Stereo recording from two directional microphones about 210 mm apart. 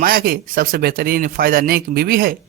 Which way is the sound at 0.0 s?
45° right (ahead or behind).